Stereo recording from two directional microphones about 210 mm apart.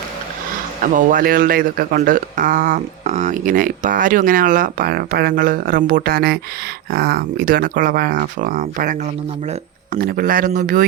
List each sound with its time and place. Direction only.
0.8 s speech: 40° right (ahead or behind)